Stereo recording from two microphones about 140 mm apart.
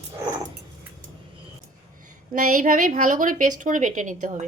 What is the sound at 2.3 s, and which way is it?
A woman's voice, 70° right (ahead or behind).